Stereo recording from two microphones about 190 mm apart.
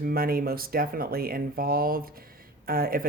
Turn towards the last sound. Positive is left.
turn(degrees=-50)  # may be behind; listen again after turning